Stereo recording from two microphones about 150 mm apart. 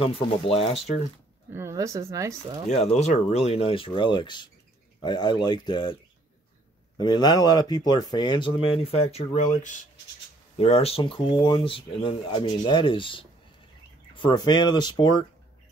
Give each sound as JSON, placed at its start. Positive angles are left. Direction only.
{"t": 0.0, "sound": "speech", "side_deg": 40}
{"t": 1.5, "sound": "speech", "side_deg": -20}
{"t": 2.9, "sound": "speech", "side_deg": 45}
{"t": 7.0, "sound": "speech", "side_deg": 30}
{"t": 10.6, "sound": "speech", "side_deg": 40}